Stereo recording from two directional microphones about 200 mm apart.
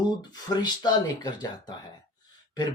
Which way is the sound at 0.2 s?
20° left (ahead or behind).